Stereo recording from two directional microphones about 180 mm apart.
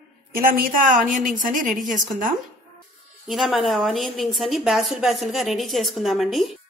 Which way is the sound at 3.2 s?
Centre (ahead or behind).